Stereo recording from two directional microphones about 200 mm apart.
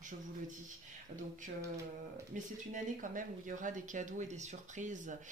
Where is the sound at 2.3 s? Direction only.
40° right (ahead or behind).